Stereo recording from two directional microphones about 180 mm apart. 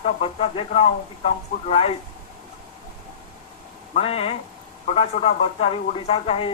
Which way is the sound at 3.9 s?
35° left (ahead or behind).